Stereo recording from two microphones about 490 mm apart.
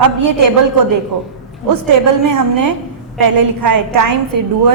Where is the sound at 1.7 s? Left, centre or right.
Right.